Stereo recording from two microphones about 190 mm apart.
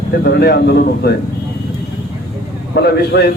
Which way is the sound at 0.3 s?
60° left (ahead or behind).